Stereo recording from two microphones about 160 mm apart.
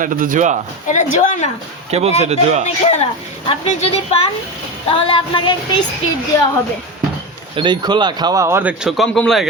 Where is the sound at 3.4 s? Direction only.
40° left (ahead or behind).